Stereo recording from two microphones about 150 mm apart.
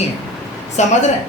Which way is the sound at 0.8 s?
50° left (ahead or behind).